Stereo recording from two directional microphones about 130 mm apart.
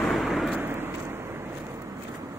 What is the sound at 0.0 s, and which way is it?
Vehicle, 5° right (ahead or behind).